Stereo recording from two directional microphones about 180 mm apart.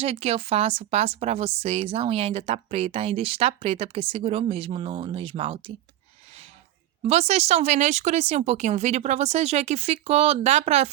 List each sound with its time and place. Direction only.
0.0 s a woman's voice: 35° right (ahead or behind)
7.0 s a woman's voice: 35° right (ahead or behind)